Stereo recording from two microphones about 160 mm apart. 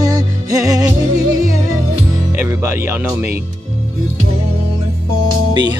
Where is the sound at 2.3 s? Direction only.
15° right (ahead or behind).